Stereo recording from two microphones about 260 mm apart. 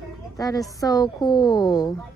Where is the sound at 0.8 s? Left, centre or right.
Centre.